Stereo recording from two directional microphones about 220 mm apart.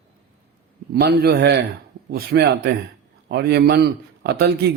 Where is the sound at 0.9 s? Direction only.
45° right (ahead or behind).